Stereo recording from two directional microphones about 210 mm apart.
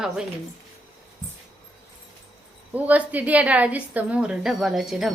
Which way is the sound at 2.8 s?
5° right (ahead or behind).